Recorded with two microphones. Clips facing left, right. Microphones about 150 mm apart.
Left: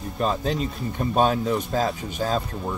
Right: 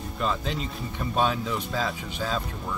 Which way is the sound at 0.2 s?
40° left (ahead or behind).